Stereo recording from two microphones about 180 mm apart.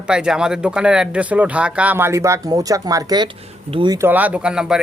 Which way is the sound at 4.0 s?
10° right (ahead or behind).